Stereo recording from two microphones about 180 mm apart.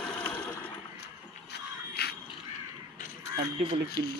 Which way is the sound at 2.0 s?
60° left (ahead or behind).